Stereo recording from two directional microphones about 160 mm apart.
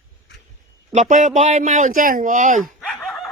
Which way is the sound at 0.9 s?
50° right (ahead or behind).